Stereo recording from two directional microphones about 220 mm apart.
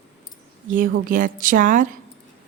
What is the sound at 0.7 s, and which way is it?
Speech, 40° right (ahead or behind).